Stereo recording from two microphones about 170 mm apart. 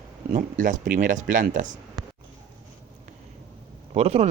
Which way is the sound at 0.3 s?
50° right (ahead or behind).